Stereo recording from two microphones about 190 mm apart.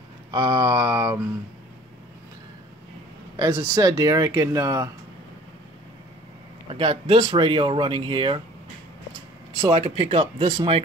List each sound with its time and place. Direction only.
0.3 s speech: 20° right (ahead or behind)
3.3 s speech: 20° right (ahead or behind)
6.7 s speech: 30° right (ahead or behind)
9.7 s speech: 35° right (ahead or behind)